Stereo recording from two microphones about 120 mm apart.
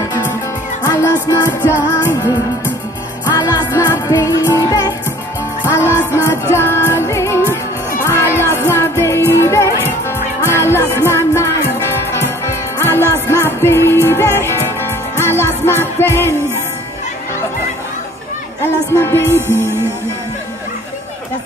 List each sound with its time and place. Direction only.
0.8 s music: 25° left (ahead or behind)
3.3 s music: 30° left (ahead or behind)
18.9 s music: 20° left (ahead or behind)